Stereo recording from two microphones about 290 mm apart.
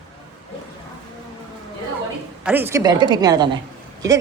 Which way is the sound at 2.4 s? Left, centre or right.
Centre.